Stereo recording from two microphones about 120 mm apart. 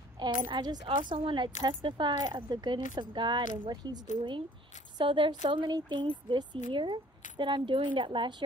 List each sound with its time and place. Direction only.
0.2 s a woman's voice: 35° right (ahead or behind)